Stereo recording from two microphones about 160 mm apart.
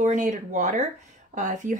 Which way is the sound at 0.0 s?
50° right (ahead or behind).